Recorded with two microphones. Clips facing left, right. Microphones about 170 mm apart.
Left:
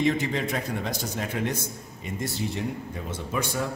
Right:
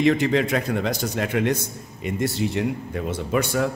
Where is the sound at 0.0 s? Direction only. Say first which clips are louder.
Right 6 dB; 80° right.